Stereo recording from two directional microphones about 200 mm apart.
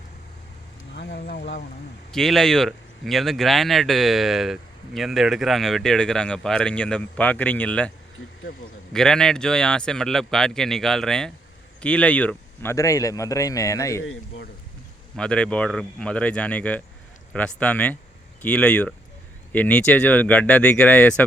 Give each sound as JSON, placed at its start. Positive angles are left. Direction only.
{"t": 0.9, "sound": "speech", "side_deg": 55}
{"t": 2.1, "sound": "speech", "side_deg": 0}
{"t": 8.5, "sound": "a man's voice", "side_deg": 55}
{"t": 8.9, "sound": "speech", "side_deg": 5}
{"t": 14.0, "sound": "speech", "side_deg": 80}
{"t": 15.1, "sound": "speech", "side_deg": 5}